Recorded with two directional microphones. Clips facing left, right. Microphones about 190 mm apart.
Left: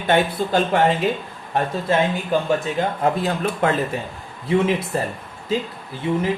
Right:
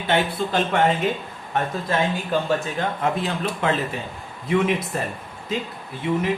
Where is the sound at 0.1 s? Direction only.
40° left (ahead or behind).